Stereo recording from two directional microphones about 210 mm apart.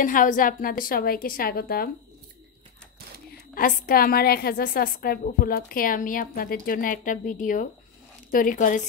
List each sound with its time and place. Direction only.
0.0 s a woman's voice: 40° left (ahead or behind)
3.5 s a woman's voice: 45° left (ahead or behind)